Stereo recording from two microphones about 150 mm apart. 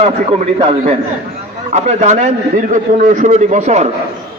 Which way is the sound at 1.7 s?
50° right (ahead or behind).